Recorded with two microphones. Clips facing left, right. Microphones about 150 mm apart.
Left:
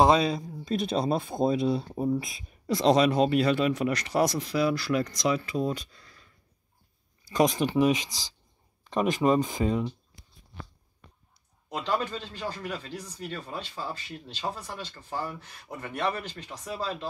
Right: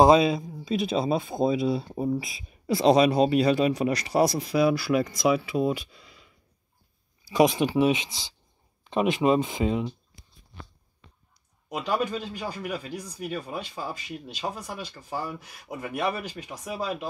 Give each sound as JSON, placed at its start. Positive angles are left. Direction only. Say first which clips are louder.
{"t": 0.0, "sound": "speech", "louder": "right 4 dB", "side_deg": -10}
{"t": 8.9, "sound": "speech", "louder": "right 1 dB", "side_deg": -20}
{"t": 11.7, "sound": "speech", "louder": "right 2 dB", "side_deg": -10}